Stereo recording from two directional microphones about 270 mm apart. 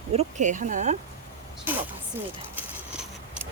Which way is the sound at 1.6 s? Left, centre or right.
Centre.